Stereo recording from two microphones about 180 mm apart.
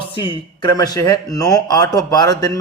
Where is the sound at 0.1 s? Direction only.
25° left (ahead or behind).